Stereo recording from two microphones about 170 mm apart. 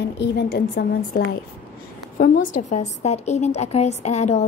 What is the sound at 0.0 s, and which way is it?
Speech, 90° left.